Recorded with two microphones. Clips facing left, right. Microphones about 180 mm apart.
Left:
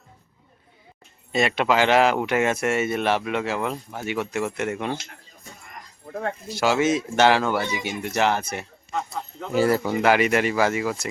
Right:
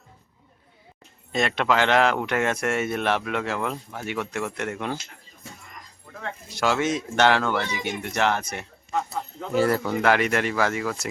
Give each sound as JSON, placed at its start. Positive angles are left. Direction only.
{"t": 1.3, "sound": "speech", "side_deg": 5}
{"t": 6.1, "sound": "speech", "side_deg": 40}
{"t": 6.5, "sound": "speech", "side_deg": 5}